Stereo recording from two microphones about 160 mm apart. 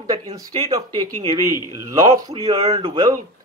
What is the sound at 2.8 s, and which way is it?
Speech, 35° right (ahead or behind).